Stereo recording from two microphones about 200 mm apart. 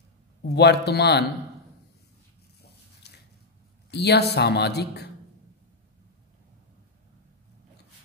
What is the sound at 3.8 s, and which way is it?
Speech, 55° left (ahead or behind).